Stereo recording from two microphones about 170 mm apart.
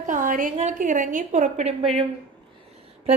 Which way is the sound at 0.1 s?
50° right (ahead or behind).